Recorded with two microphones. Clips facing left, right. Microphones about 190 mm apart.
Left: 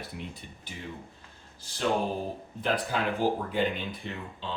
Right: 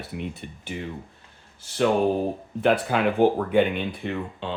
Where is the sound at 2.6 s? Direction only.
70° right (ahead or behind).